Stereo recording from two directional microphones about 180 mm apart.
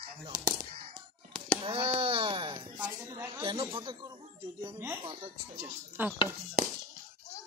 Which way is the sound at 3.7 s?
25° right (ahead or behind).